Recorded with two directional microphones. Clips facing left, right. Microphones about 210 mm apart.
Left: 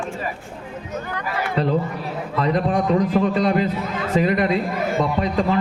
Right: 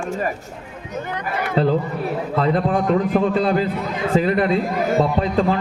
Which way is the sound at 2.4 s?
30° right (ahead or behind).